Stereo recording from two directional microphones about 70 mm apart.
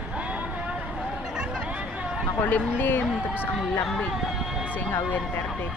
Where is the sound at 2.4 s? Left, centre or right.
Left.